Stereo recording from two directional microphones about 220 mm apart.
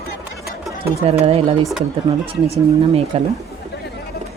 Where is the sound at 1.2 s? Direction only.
25° right (ahead or behind).